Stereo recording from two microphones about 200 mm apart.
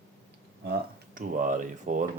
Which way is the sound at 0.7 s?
45° right (ahead or behind).